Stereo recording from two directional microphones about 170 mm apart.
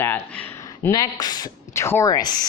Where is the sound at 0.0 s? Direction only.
10° left (ahead or behind).